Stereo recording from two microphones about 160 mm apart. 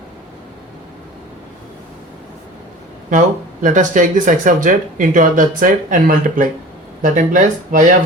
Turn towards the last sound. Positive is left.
turn(degrees=-55)  # may be behind; listen again after turning